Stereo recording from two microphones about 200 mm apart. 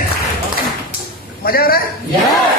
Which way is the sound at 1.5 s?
45° left (ahead or behind).